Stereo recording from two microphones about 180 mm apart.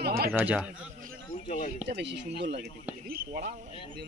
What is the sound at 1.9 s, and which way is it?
Speech, 75° right (ahead or behind).